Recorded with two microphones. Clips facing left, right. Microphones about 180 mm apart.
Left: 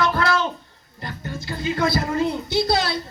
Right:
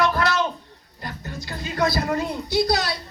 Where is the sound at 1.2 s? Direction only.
25° left (ahead or behind).